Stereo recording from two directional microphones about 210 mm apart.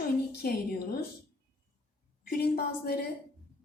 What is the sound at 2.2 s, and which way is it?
Speech, 50° left (ahead or behind).